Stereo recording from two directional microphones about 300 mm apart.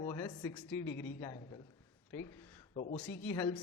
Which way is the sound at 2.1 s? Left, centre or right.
Centre.